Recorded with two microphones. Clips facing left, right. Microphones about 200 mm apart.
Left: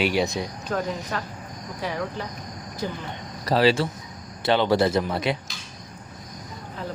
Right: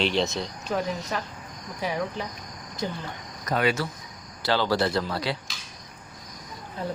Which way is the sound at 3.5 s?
30° left (ahead or behind).